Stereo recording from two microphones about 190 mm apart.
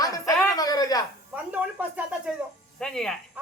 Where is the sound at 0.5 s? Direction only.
20° left (ahead or behind).